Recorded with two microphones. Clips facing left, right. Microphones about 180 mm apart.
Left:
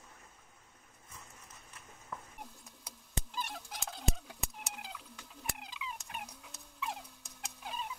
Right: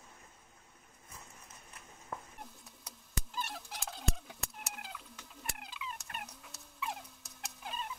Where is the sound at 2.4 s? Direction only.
Centre (ahead or behind).